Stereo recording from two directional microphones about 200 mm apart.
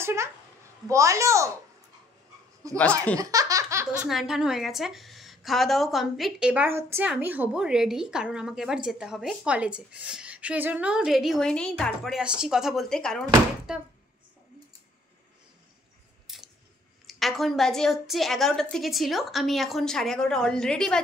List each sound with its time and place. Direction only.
0.0 s a child's voice: 15° right (ahead or behind)
2.8 s speech: 5° left (ahead or behind)
3.2 s laughter: 15° right (ahead or behind)
4.1 s a woman's voice: centre (ahead or behind)
16.3 s scissors: centre (ahead or behind)
17.0 s a woman's voice: centre (ahead or behind)